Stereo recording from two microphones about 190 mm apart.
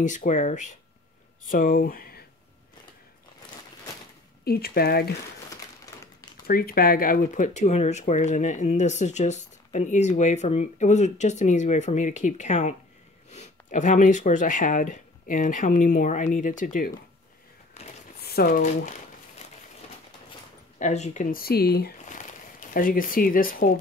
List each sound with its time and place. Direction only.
0.0 s speech: 40° left (ahead or behind)
4.5 s speech: 55° left (ahead or behind)
6.4 s speech: 50° left (ahead or behind)
17.8 s a sound: 35° left (ahead or behind)
18.2 s crumpling: 50° left (ahead or behind)
20.8 s speech: 35° left (ahead or behind); by 21.9 s 55° left (ahead or behind)
22.0 s a sound: 40° left (ahead or behind)